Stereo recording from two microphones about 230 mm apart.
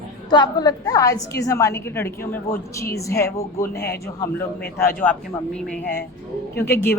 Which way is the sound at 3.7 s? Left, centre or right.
Left.